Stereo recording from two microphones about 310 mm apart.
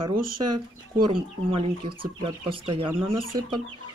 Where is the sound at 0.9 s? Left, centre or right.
Centre.